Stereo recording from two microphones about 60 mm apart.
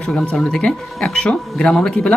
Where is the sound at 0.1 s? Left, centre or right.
Centre.